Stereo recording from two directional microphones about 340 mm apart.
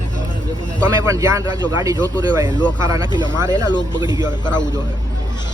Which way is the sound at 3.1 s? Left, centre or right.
Centre.